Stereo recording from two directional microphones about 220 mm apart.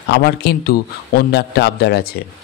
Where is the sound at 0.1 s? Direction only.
45° left (ahead or behind).